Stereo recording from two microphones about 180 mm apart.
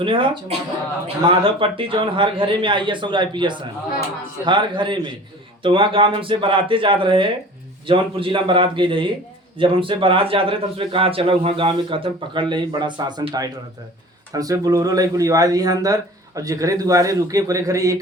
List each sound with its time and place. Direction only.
0.0 s a man's voice: 30° right (ahead or behind)